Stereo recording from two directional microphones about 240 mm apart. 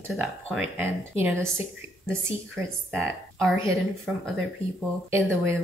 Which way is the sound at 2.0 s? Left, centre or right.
Centre.